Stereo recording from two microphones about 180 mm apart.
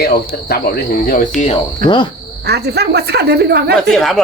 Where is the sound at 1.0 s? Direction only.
50° left (ahead or behind).